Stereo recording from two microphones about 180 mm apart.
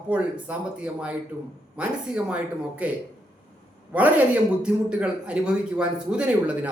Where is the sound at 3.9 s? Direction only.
10° right (ahead or behind).